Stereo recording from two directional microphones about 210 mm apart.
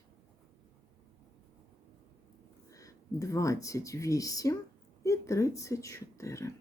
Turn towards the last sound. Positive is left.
turn(degrees=15)  # may be behind; listen again after turning